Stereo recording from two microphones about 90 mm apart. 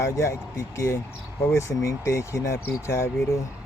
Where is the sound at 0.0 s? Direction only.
35° left (ahead or behind).